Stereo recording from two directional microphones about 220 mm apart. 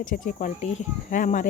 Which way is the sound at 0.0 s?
40° left (ahead or behind).